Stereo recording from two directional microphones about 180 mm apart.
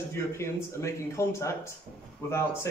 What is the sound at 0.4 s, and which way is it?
Speech, 15° left (ahead or behind).